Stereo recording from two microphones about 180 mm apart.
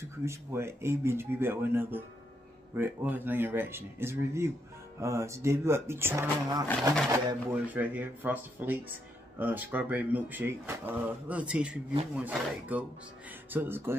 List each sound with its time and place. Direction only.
0.2 s speech: 15° right (ahead or behind)
7.6 s speech: 10° right (ahead or behind)